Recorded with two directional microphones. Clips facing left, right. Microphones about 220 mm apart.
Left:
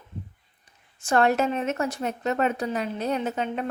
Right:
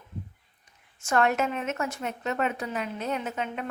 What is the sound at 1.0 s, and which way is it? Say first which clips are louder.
A woman's voice: left 3 dB; 35° left (ahead or behind).